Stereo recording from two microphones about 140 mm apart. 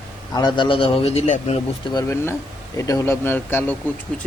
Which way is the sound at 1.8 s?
25° left (ahead or behind).